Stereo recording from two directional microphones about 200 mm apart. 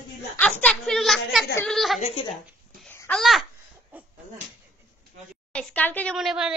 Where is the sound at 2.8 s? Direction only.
10° left (ahead or behind).